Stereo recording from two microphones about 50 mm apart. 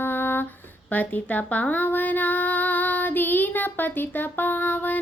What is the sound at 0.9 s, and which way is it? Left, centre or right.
Speech, left.